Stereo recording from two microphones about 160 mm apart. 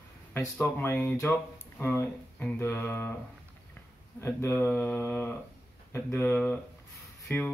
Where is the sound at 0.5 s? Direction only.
10° left (ahead or behind).